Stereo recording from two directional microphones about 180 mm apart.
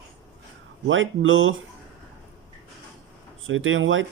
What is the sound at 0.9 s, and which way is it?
Speech, 90° right.